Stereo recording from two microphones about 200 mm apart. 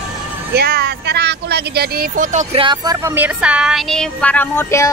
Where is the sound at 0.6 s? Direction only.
55° right (ahead or behind); by 2.6 s 35° right (ahead or behind).